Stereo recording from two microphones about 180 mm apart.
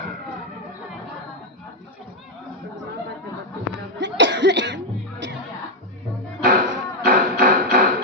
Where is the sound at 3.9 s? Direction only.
80° right.